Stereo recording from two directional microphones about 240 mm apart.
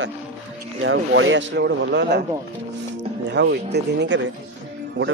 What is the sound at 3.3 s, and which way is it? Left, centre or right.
Speech, right.